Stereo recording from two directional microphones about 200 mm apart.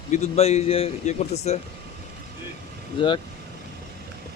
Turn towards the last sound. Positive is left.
turn(degrees=25)  # may be behind; listen again after turning